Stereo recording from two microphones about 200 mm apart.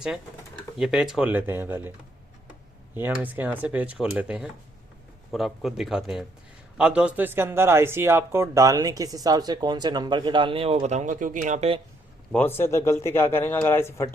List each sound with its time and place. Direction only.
0.8 s speech: centre (ahead or behind)
2.9 s speech: 10° right (ahead or behind); by 11.8 s 35° right (ahead or behind)
12.3 s speech: 10° left (ahead or behind)